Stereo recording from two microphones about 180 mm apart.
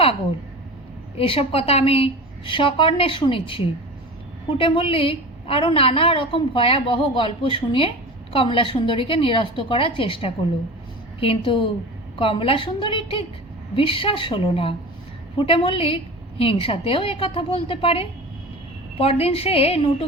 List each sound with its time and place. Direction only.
1.1 s a woman's voice: 30° left (ahead or behind)